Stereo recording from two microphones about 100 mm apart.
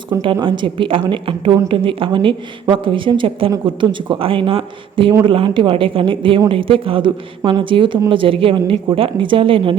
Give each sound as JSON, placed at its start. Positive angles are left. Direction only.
{"t": 0.1, "sound": "a woman's voice", "side_deg": -35}
{"t": 0.4, "sound": "a woman's voice", "side_deg": -55}